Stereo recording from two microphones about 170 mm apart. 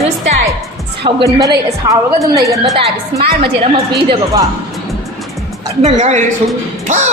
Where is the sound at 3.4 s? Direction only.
30° right (ahead or behind).